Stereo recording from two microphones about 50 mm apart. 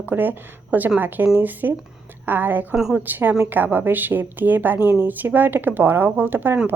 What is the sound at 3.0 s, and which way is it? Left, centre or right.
A woman's voice, right.